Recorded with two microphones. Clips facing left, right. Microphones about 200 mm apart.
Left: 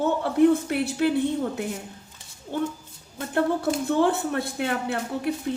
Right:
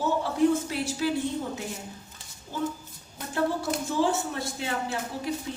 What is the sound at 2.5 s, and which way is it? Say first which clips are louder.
A woman's voice: left 3 dB; 60° left (ahead or behind).